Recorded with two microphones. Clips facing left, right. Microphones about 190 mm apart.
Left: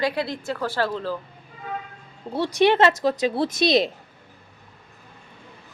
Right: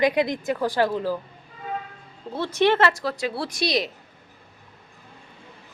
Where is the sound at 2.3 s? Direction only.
15° left (ahead or behind).